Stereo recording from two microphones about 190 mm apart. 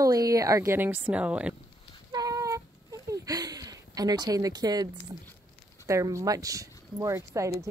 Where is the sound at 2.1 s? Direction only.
20° right (ahead or behind).